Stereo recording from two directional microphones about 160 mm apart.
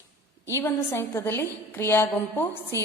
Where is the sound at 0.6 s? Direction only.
15° left (ahead or behind).